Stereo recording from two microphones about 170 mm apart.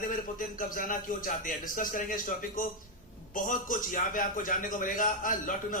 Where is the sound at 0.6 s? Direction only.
55° left (ahead or behind).